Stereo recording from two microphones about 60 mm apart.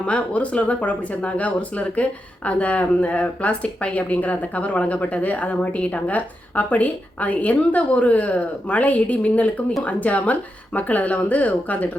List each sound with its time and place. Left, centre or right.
0.0 s speech: left